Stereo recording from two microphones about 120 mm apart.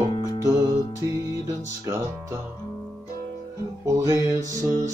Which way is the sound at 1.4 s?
20° right (ahead or behind).